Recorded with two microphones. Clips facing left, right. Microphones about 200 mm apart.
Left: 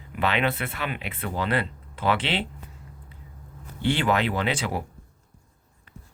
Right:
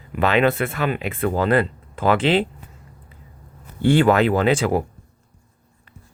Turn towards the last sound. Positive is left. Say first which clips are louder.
# right 9 dB
turn(degrees=-50)  # may be behind; listen again after turning